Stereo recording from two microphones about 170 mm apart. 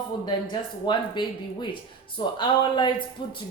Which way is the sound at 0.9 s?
25° left (ahead or behind).